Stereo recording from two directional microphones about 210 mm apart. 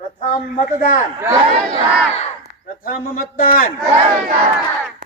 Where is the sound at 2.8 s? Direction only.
45° left (ahead or behind).